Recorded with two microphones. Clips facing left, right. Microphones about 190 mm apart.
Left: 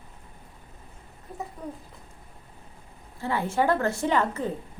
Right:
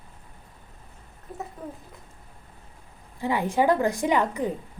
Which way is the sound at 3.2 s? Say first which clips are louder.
Right 2 dB; 15° right (ahead or behind).